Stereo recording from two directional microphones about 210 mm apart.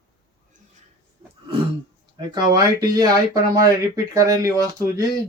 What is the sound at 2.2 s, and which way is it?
Speech, 20° right (ahead or behind).